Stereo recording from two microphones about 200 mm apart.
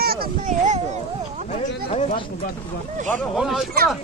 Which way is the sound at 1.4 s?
35° left (ahead or behind).